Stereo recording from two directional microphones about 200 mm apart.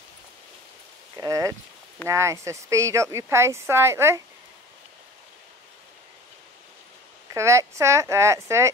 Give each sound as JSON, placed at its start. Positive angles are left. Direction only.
{"t": 1.1, "sound": "speech", "side_deg": -15}
{"t": 7.3, "sound": "speech", "side_deg": -15}